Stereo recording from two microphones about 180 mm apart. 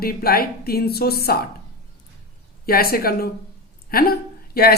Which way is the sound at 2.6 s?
55° left (ahead or behind).